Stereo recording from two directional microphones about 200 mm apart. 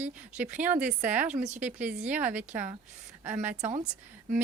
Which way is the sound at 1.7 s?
5° right (ahead or behind).